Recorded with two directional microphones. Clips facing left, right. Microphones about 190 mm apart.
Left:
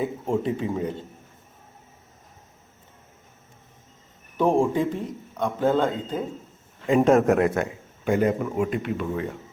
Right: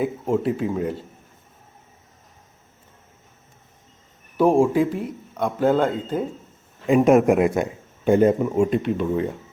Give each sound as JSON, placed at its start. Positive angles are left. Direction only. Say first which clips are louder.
{"t": 0.0, "sound": "speech", "louder": "right 3 dB", "side_deg": 0}
{"t": 4.4, "sound": "a man's voice", "louder": "right 4 dB", "side_deg": -10}
{"t": 8.0, "sound": "speech", "louder": "right 5 dB", "side_deg": -25}